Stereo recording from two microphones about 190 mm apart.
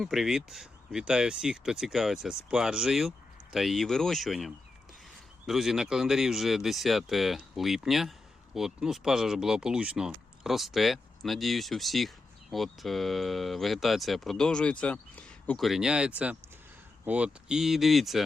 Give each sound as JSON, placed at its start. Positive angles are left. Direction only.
{"t": 0.0, "sound": "speech", "side_deg": 0}